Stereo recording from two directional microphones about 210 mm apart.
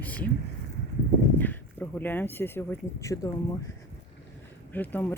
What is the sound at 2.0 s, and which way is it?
Speech, 10° left (ahead or behind).